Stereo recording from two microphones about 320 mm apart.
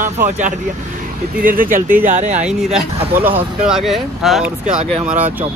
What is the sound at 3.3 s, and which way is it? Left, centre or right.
Speech, centre.